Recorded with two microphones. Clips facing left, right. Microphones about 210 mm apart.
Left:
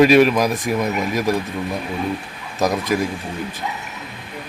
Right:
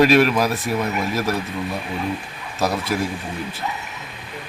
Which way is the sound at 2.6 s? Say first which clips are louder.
Left 3 dB; 15° left (ahead or behind).